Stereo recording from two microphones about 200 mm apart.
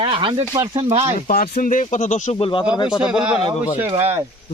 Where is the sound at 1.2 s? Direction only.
45° left (ahead or behind).